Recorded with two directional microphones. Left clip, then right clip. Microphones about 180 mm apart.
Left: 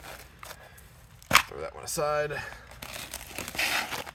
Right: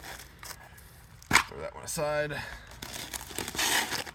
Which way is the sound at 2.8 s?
5° left (ahead or behind).